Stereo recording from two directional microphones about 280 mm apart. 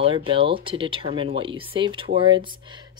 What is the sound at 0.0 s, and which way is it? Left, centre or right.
Speech, centre.